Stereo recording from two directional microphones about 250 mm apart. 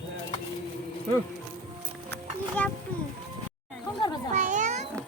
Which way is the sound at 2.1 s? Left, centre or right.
Centre.